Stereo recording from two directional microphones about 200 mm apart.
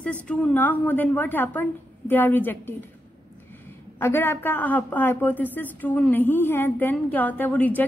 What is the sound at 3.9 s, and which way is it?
A woman's voice, 10° left (ahead or behind).